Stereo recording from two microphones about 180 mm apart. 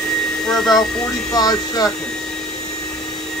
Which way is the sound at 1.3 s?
20° left (ahead or behind).